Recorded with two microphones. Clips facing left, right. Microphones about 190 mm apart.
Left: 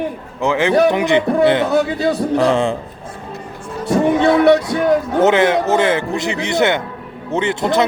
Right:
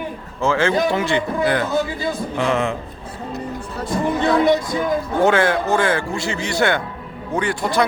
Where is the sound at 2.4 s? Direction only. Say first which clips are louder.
Left 3 dB; 30° left (ahead or behind).